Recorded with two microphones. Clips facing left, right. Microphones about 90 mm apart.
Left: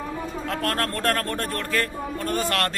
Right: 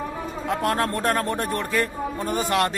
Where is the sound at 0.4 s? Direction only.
15° right (ahead or behind).